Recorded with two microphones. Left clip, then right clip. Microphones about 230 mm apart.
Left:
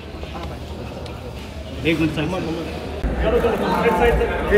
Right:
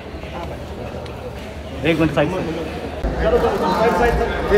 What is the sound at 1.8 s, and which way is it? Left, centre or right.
Speech, right.